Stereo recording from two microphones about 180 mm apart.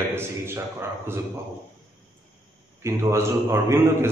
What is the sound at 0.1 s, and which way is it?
Speech, 15° right (ahead or behind).